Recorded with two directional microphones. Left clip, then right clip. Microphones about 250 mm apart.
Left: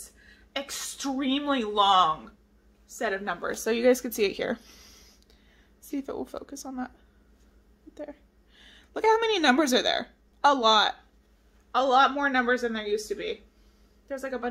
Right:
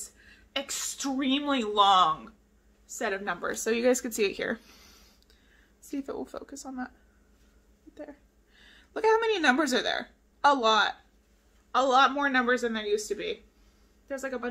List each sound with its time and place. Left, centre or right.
0.3 s a woman's voice: centre
5.9 s speech: centre
7.9 s a woman's voice: centre
11.7 s speech: centre